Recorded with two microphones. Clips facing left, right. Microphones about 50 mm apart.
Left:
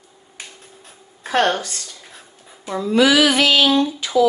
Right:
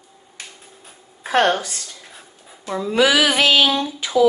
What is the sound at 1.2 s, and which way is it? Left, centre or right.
Speech, centre.